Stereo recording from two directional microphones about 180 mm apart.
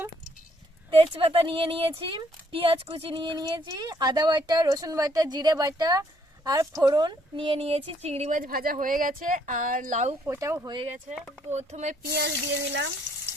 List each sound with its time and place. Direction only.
0.9 s speech: 30° right (ahead or behind)
10.2 s speech: 15° right (ahead or behind)
10.8 s speech: 40° right (ahead or behind)
12.0 s a sound: 70° right (ahead or behind); by 12.9 s 85° right